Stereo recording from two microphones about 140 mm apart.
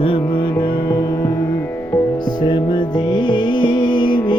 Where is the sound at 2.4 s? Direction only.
35° left (ahead or behind).